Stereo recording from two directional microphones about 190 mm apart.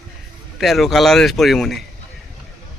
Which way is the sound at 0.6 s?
Centre (ahead or behind).